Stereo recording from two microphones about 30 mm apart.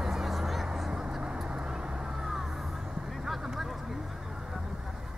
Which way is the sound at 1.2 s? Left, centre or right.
Right.